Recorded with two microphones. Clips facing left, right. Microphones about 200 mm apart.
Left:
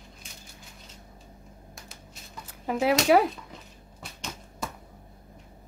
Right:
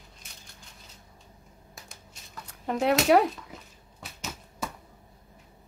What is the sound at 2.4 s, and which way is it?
Speech, 5° left (ahead or behind).